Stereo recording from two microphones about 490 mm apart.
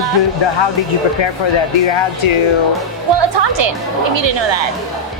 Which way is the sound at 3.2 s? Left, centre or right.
Right.